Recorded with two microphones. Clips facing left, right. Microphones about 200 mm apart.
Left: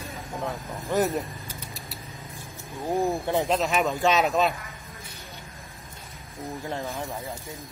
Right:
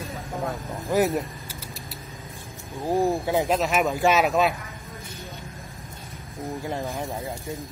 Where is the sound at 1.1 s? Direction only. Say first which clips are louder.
Right 2 dB; 5° right (ahead or behind).